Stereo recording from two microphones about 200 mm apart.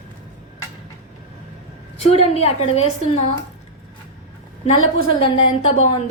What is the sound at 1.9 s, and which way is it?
A woman's voice, 30° left (ahead or behind).